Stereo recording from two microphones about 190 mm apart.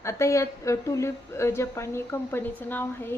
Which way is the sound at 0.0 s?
15° left (ahead or behind).